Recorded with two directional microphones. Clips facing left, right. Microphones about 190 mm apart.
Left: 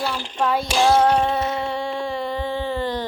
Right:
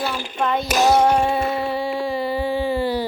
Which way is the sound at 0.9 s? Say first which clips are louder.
Right 1 dB; 10° right (ahead or behind).